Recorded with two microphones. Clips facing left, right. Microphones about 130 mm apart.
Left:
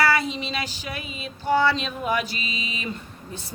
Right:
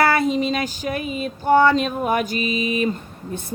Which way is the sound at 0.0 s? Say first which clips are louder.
Right 5 dB; 50° right (ahead or behind).